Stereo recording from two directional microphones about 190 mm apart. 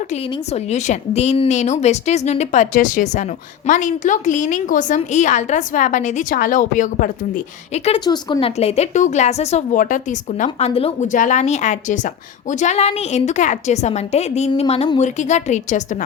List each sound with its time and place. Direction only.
0.3 s a woman's voice: 35° left (ahead or behind)